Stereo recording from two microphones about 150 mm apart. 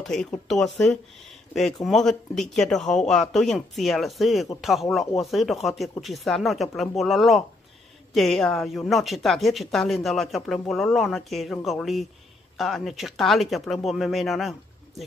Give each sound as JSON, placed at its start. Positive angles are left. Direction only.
{"t": 0.0, "sound": "speech", "side_deg": 5}